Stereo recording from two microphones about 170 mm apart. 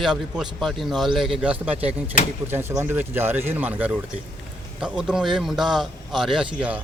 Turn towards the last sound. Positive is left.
turn(degrees=-5)  # may be behind; listen again after turning